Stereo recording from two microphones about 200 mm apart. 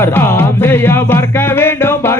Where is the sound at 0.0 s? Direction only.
10° left (ahead or behind).